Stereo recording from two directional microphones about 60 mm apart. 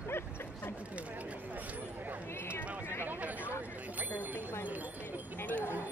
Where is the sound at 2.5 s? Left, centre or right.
Left.